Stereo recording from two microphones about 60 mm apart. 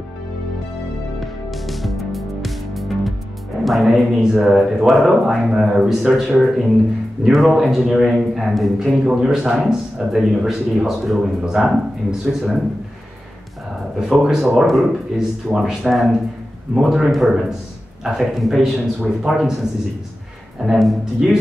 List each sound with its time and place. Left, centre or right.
1.2 s music: centre
3.6 s a man's voice: centre
13.9 s a man's voice: centre
20.6 s a man's voice: centre